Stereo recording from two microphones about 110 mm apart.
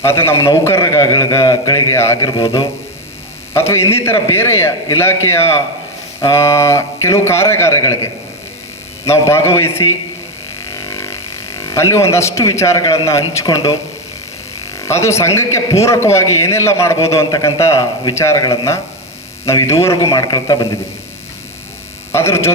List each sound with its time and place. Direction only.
0.0 s a man's voice: 25° left (ahead or behind)
0.9 s a man's voice: 35° left (ahead or behind)
3.5 s a man's voice: 25° left (ahead or behind)
10.6 s a sound: 25° left (ahead or behind)
13.4 s a man's voice: 30° left (ahead or behind)
14.8 s a man's voice: 25° left (ahead or behind)
22.1 s a man's voice: 25° left (ahead or behind)